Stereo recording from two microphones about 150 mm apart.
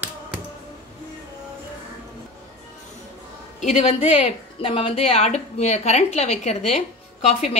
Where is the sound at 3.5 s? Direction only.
45° left (ahead or behind).